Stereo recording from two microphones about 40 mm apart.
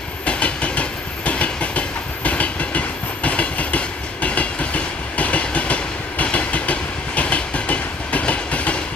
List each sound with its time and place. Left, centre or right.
0.2 s train: left